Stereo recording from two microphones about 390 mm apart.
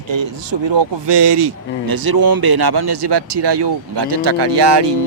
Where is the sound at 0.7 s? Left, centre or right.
Right.